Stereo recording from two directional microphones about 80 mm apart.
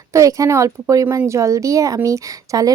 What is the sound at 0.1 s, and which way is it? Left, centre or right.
A woman's voice, right.